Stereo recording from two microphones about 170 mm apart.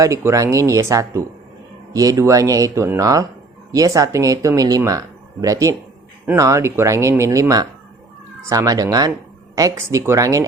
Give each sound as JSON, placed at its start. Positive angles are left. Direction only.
{"t": 0.0, "sound": "speech", "side_deg": -15}